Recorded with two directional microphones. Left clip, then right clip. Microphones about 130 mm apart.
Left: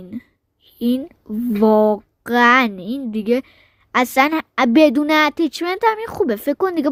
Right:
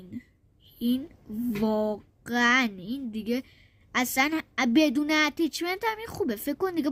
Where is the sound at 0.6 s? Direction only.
40° left (ahead or behind).